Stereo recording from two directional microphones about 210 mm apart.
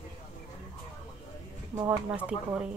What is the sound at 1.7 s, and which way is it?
Speech, 15° right (ahead or behind).